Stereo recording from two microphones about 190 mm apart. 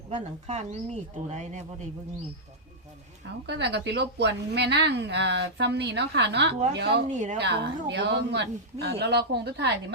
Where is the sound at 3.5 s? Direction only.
60° right (ahead or behind).